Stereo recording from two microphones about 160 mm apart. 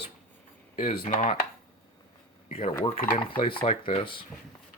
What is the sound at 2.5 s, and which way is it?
Speech, 40° left (ahead or behind).